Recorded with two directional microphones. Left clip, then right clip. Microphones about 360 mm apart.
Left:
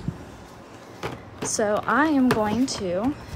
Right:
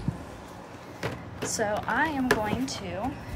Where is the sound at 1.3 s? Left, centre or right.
Centre.